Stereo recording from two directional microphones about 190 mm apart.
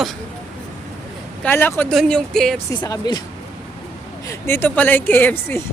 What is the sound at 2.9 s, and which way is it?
Speech, 20° left (ahead or behind).